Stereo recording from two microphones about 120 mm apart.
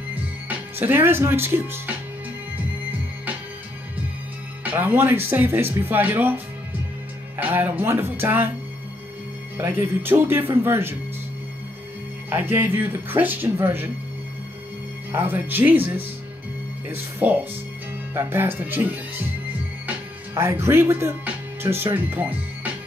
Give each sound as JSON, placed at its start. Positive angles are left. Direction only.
{"t": 0.1, "sound": "speech", "side_deg": -15}
{"t": 4.6, "sound": "speech", "side_deg": -15}
{"t": 9.6, "sound": "speech", "side_deg": -20}
{"t": 12.3, "sound": "speech", "side_deg": -15}
{"t": 15.1, "sound": "speech", "side_deg": -15}
{"t": 19.9, "sound": "speech", "side_deg": -20}